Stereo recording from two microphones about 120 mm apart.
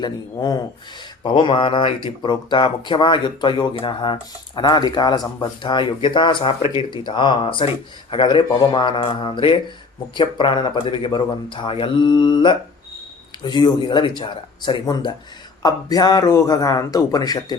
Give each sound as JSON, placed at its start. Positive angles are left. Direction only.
{"t": 0.0, "sound": "speech", "side_deg": 30}
{"t": 1.2, "sound": "mantra", "side_deg": 45}
{"t": 2.0, "sound": "speech", "side_deg": 40}
{"t": 9.2, "sound": "mantra", "side_deg": 45}
{"t": 10.2, "sound": "speech", "side_deg": 40}